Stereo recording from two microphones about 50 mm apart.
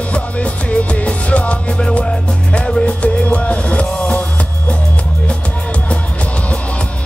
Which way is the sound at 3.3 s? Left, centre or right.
Left.